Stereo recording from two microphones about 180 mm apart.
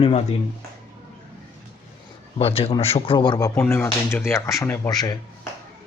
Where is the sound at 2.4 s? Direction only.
35° left (ahead or behind).